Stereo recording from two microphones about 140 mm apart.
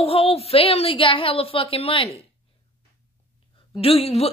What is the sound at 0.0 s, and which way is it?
A woman's voice, 45° left (ahead or behind).